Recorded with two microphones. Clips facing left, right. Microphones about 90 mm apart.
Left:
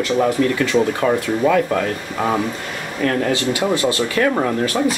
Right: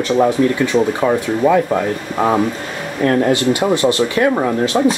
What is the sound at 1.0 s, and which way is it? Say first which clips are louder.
Speech: right 2 dB; 15° right (ahead or behind).